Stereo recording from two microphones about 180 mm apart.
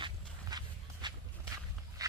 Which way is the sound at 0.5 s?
20° right (ahead or behind).